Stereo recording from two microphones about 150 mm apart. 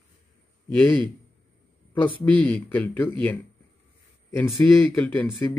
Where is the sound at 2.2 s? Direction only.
10° left (ahead or behind).